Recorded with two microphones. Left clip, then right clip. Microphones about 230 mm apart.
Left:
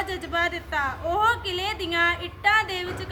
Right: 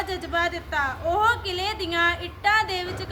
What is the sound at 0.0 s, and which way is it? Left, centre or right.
A woman's voice, centre.